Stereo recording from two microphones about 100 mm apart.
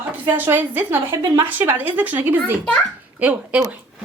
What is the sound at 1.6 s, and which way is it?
A woman's voice, 20° right (ahead or behind).